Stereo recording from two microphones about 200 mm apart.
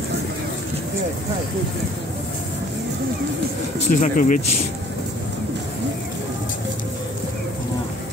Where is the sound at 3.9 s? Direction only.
40° left (ahead or behind).